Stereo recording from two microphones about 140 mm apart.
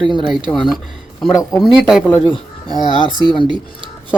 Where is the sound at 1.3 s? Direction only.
25° left (ahead or behind).